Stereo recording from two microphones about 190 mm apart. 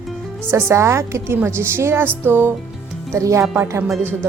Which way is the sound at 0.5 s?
15° right (ahead or behind).